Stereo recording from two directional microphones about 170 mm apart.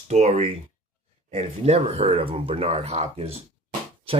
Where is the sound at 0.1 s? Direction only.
40° right (ahead or behind).